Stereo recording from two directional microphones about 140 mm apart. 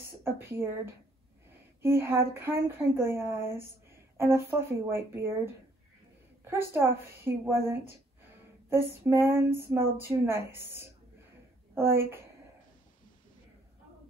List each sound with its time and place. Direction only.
0.2 s a woman's voice: 15° right (ahead or behind)